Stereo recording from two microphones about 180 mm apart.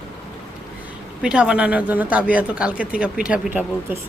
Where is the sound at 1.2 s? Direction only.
5° right (ahead or behind).